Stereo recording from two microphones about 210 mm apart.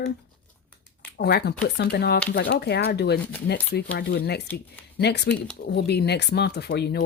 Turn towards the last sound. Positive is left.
turn(degrees=50)  # may be behind; listen again after turning